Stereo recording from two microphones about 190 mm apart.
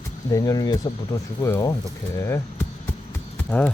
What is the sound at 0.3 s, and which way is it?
Speech, 20° left (ahead or behind).